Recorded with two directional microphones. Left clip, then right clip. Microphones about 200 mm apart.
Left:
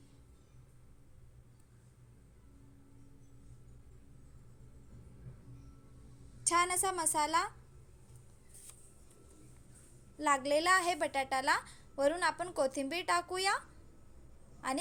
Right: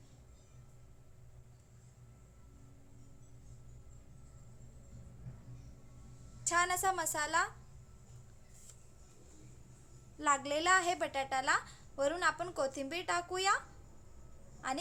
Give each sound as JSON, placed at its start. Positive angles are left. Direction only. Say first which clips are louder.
{"t": 6.4, "sound": "a woman's voice", "louder": "left 1 dB", "side_deg": 15}
{"t": 10.2, "sound": "a woman's voice", "louder": "left 2 dB", "side_deg": 15}
{"t": 14.6, "sound": "a woman's voice", "louder": "left 1 dB", "side_deg": 20}